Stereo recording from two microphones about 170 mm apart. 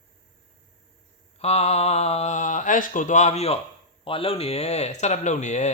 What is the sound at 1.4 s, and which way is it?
Speech, 40° left (ahead or behind).